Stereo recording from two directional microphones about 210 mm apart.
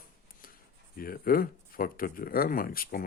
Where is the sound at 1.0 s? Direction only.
45° left (ahead or behind).